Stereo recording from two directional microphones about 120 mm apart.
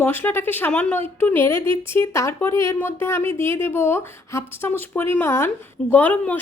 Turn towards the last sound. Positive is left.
turn(degrees=15)  # may be behind; listen again after turning